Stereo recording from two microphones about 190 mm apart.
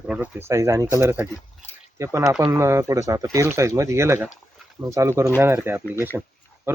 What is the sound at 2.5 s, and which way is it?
Speech, 15° right (ahead or behind).